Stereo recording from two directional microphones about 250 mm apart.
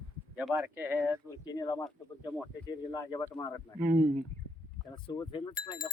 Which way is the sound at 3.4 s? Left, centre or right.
Centre.